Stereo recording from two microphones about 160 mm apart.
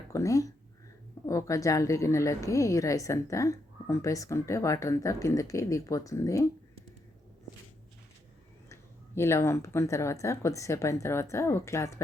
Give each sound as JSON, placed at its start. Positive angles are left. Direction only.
{"t": 0.1, "sound": "a woman's voice", "side_deg": 20}
{"t": 8.7, "sound": "speech", "side_deg": 15}